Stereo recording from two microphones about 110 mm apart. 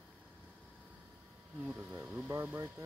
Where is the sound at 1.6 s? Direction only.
15° right (ahead or behind).